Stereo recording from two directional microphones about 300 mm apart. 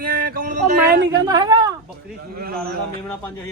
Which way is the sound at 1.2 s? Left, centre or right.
Centre.